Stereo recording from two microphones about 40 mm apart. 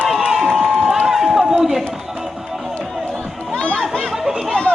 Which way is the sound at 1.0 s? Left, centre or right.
Centre.